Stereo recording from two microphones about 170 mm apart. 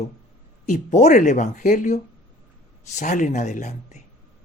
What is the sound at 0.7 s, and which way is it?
Speech, 45° left (ahead or behind).